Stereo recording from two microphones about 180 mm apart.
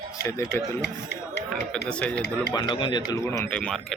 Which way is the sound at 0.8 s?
70° left (ahead or behind).